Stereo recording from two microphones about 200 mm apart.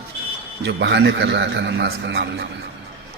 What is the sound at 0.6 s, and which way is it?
A man's voice, 60° right (ahead or behind).